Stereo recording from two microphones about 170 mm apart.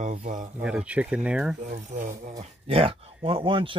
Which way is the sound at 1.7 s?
50° right (ahead or behind).